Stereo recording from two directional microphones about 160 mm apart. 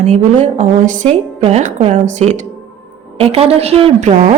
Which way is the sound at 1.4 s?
45° right (ahead or behind).